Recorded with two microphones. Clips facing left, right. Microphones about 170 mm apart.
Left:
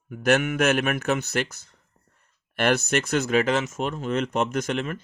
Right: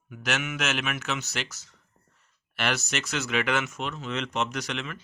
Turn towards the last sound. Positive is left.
turn(degrees=50)  # may be behind; listen again after turning